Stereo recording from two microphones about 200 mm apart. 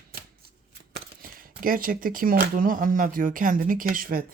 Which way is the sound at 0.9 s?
45° right (ahead or behind).